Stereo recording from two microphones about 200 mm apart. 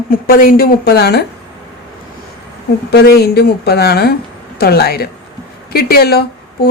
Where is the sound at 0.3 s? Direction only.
45° left (ahead or behind).